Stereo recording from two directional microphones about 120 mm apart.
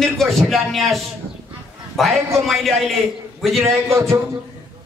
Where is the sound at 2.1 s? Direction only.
25° right (ahead or behind).